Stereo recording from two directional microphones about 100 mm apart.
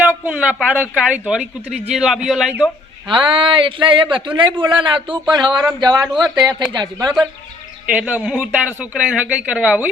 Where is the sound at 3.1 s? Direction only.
55° right (ahead or behind).